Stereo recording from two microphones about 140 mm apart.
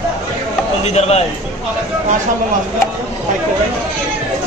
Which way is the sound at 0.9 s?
50° left (ahead or behind).